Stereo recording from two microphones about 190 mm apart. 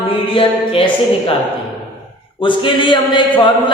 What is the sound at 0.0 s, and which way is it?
Speech, 25° left (ahead or behind).